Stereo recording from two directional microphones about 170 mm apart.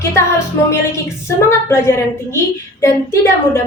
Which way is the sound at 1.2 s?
15° left (ahead or behind).